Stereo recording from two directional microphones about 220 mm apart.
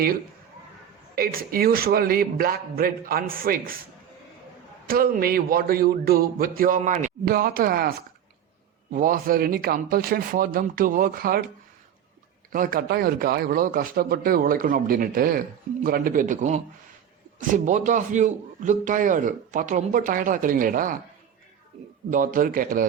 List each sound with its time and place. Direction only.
1.1 s a man's voice: 40° right (ahead or behind)
4.9 s a man's voice: 40° right (ahead or behind)
12.5 s a man's voice: 40° right (ahead or behind)
22.1 s a man's voice: 35° right (ahead or behind)